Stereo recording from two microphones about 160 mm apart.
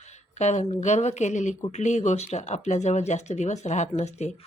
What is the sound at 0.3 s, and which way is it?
Speech, 45° left (ahead or behind).